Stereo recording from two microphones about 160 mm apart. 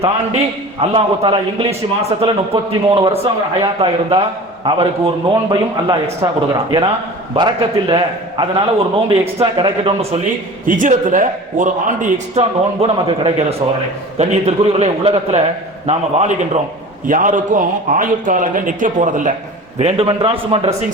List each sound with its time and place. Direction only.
0.0 s a man's voice: 40° right (ahead or behind)
10.7 s a man's voice: 55° right (ahead or behind)
12.4 s a man's voice: 35° right (ahead or behind); by 19.3 s 50° right (ahead or behind)
19.8 s a man's voice: 35° right (ahead or behind)